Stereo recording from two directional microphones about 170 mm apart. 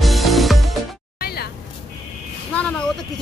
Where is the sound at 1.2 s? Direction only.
65° left (ahead or behind).